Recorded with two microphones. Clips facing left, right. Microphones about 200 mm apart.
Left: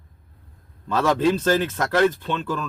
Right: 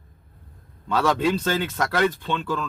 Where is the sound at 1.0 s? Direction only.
Centre (ahead or behind).